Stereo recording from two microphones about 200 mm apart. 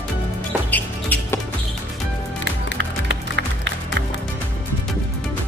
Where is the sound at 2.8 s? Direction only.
65° right (ahead or behind).